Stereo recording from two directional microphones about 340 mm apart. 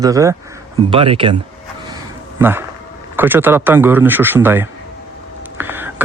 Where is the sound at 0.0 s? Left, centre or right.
Centre.